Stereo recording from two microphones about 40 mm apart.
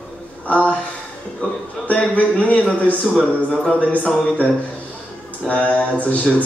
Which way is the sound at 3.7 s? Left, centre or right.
Left.